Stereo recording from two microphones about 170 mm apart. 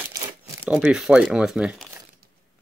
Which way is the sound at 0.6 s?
5° right (ahead or behind).